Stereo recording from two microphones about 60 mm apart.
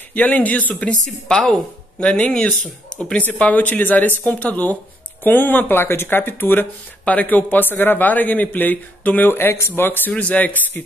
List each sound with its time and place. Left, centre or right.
0.1 s speech: left
0.8 s a woman's voice: centre; by 10.8 s left